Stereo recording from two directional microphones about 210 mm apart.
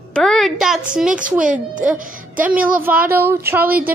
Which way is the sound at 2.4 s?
5° right (ahead or behind).